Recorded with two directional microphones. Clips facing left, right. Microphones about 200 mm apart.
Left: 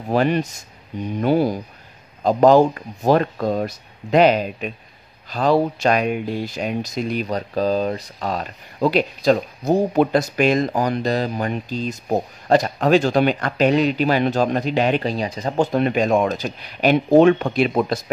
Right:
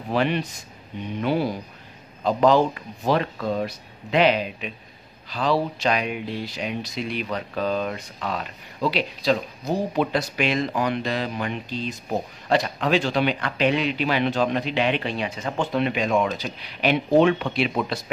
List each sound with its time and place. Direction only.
0.1 s speech: 45° left (ahead or behind)